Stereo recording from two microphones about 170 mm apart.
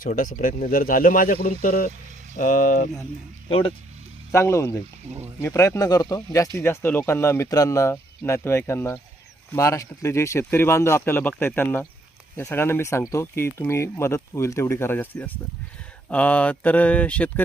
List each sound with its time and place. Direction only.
0.0 s speech: 55° left (ahead or behind)
4.3 s speech: 15° left (ahead or behind)